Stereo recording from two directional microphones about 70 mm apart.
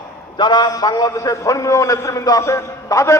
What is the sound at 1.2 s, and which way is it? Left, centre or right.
A man's voice, left.